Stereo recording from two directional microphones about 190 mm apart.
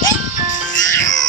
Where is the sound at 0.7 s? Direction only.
75° left (ahead or behind).